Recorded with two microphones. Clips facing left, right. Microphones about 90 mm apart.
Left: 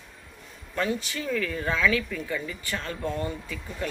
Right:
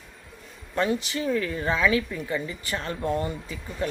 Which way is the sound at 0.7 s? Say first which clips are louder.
Right 3 dB; 20° right (ahead or behind).